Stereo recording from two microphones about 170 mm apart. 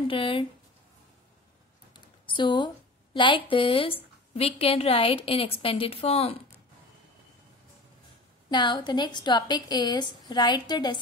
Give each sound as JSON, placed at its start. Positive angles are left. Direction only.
{"t": 0.1, "sound": "a woman's voice", "side_deg": 30}
{"t": 2.0, "sound": "a sound", "side_deg": 25}
{"t": 4.3, "sound": "a woman's voice", "side_deg": 35}
{"t": 8.5, "sound": "a woman's voice", "side_deg": 25}